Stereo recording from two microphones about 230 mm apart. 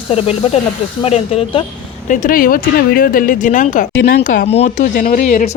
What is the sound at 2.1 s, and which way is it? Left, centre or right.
Speech, left.